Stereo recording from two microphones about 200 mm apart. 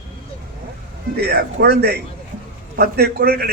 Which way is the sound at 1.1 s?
50° right (ahead or behind).